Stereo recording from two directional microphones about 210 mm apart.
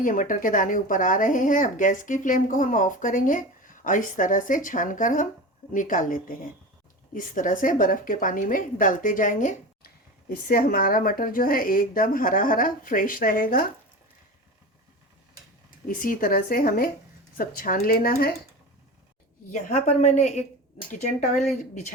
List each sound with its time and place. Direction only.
0.0 s a woman's voice: 40° left (ahead or behind)
15.9 s speech: 45° left (ahead or behind)
19.5 s a woman's voice: 35° left (ahead or behind)